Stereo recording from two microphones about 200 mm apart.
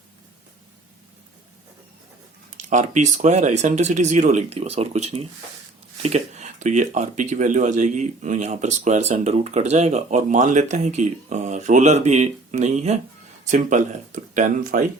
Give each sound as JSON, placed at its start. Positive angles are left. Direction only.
{"t": 2.6, "sound": "speech", "side_deg": -40}